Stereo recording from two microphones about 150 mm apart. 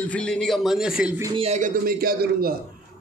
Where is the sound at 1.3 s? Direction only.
45° right (ahead or behind).